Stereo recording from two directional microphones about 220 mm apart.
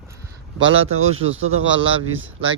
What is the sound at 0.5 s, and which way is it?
Speech, 60° right (ahead or behind).